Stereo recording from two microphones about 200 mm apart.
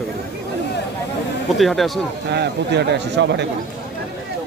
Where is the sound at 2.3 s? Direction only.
55° right (ahead or behind).